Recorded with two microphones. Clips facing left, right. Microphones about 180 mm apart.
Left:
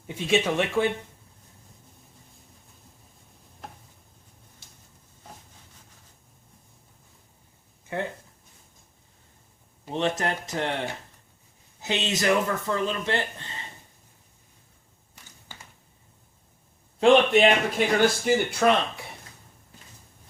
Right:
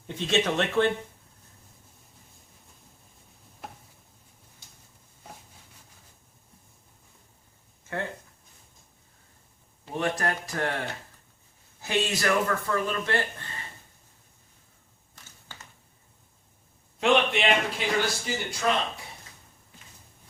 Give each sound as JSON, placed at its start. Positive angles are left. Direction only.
{"t": 0.1, "sound": "speech", "side_deg": 10}
{"t": 7.9, "sound": "a sound", "side_deg": 15}
{"t": 9.9, "sound": "speech", "side_deg": 20}
{"t": 11.8, "sound": "speech", "side_deg": 20}
{"t": 17.0, "sound": "speech", "side_deg": 45}